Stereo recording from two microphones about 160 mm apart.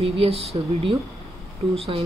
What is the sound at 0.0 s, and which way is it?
Speech, 40° right (ahead or behind).